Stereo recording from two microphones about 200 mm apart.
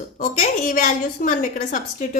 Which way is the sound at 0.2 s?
40° left (ahead or behind).